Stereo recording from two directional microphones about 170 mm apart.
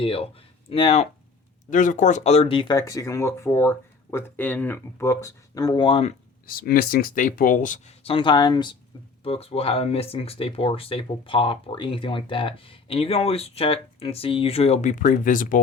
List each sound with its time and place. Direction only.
0.0 s speech: 35° left (ahead or behind)
1.7 s speech: 50° left (ahead or behind); by 6.1 s 35° left (ahead or behind)
6.5 s speech: 60° left (ahead or behind)
8.0 s speech: 30° left (ahead or behind); by 15.6 s 50° left (ahead or behind)